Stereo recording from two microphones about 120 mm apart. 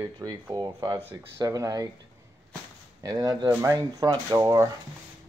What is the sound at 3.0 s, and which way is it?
Speech, 30° right (ahead or behind).